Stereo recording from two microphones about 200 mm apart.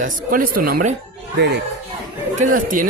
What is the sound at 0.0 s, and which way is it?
Speech, 45° right (ahead or behind).